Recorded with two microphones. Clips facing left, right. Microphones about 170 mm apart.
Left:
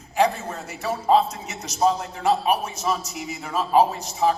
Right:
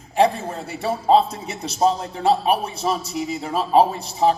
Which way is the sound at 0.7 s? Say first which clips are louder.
Right 3 dB; 30° right (ahead or behind).